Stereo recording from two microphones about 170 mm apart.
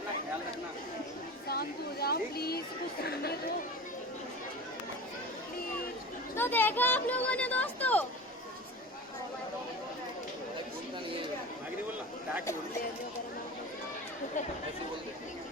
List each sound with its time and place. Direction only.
1.5 s speech: 65° left (ahead or behind)
6.3 s speech: 10° left (ahead or behind)